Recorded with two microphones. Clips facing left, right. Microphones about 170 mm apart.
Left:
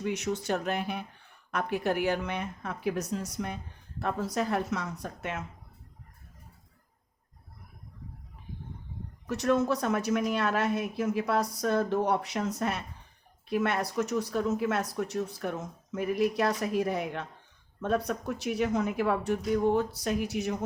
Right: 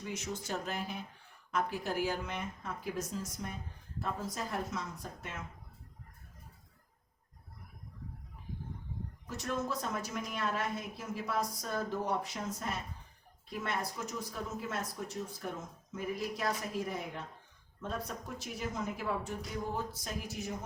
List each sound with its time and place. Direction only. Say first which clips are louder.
0.0 s speech: left 9 dB; 70° left (ahead or behind)
9.2 s speech: left 11 dB; 70° left (ahead or behind)